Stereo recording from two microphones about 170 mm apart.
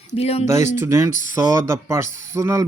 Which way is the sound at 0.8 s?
15° right (ahead or behind).